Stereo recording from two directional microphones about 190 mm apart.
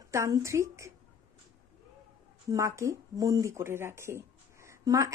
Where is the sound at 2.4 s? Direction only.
15° right (ahead or behind).